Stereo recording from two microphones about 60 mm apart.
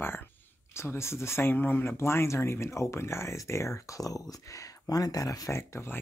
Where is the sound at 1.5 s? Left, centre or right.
Left.